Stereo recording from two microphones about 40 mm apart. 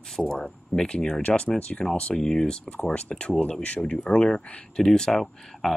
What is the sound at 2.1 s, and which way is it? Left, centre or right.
Speech, centre.